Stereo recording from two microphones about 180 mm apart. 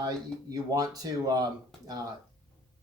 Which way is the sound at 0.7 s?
20° right (ahead or behind).